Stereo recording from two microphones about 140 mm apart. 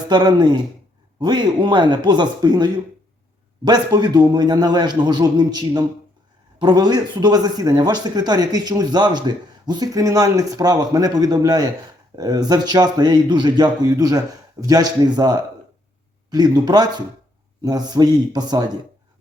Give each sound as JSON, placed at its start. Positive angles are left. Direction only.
{"t": 0.1, "sound": "a man's voice", "side_deg": -30}